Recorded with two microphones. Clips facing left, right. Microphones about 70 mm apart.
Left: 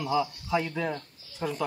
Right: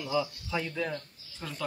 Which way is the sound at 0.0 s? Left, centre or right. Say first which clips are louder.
Left 3 dB; centre.